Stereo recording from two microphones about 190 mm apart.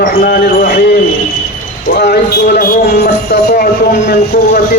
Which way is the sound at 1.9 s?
55° left (ahead or behind).